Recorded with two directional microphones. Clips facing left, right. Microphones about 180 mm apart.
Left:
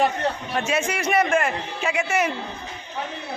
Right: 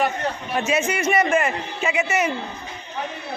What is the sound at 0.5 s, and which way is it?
A man's voice, 5° right (ahead or behind).